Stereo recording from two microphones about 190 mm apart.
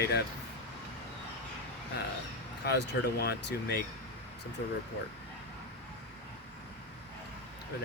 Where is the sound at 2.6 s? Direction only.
60° left (ahead or behind).